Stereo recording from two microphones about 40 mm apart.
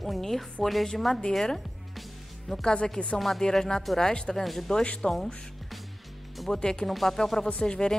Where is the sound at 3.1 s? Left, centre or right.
Centre.